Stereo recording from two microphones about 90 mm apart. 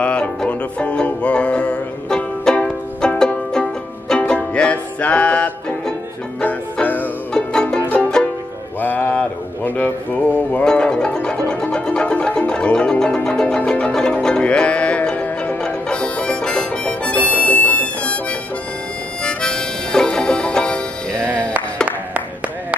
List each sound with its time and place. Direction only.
0.0 s music: 10° left (ahead or behind)
7.3 s music: 10° left (ahead or behind)
8.8 s a sound: 20° left (ahead or behind)
10.5 s music: 10° left (ahead or behind)
19.2 s music: 10° left (ahead or behind)
21.8 s clapping: 15° right (ahead or behind)